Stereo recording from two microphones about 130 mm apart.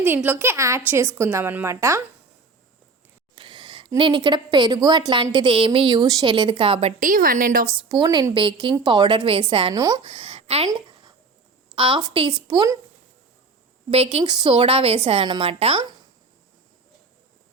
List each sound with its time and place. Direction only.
0.0 s a woman's voice: 15° right (ahead or behind)
3.3 s a woman's voice: 40° right (ahead or behind)
7.0 s a woman's voice: 90° right
7.9 s a woman's voice: 35° right (ahead or behind)
9.7 s speech: 30° right (ahead or behind)
10.0 s a woman's voice: 45° right (ahead or behind)
11.7 s a woman's voice: 40° right (ahead or behind)
13.9 s a woman's voice: 50° right (ahead or behind)
14.3 s a woman's voice: 35° right (ahead or behind); by 15.9 s 50° right (ahead or behind)